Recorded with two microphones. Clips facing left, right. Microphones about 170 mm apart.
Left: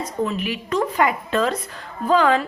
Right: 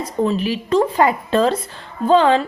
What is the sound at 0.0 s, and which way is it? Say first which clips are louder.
Speech: right 5 dB; 30° right (ahead or behind).